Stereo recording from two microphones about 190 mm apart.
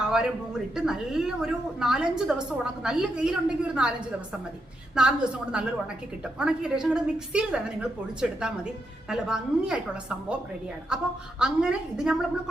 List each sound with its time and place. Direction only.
0.0 s a woman's voice: 5° right (ahead or behind)